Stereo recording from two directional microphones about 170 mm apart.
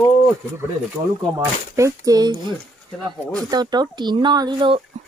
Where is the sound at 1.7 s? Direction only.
20° right (ahead or behind).